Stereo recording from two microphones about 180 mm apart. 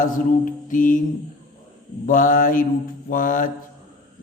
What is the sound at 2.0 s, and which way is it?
A man's voice, 50° left (ahead or behind).